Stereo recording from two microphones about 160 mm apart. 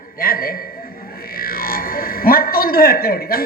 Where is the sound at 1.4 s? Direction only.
65° left (ahead or behind).